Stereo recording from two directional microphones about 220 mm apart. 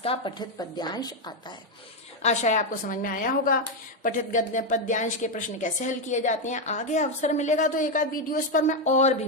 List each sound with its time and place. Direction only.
0.0 s a woman's voice: 25° left (ahead or behind)
2.2 s speech: 30° left (ahead or behind)